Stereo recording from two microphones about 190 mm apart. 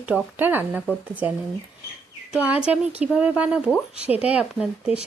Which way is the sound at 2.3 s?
5° right (ahead or behind).